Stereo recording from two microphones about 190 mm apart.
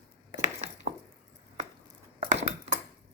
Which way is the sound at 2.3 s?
35° right (ahead or behind).